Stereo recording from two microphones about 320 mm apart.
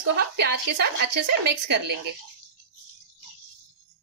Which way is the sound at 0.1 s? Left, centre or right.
Right.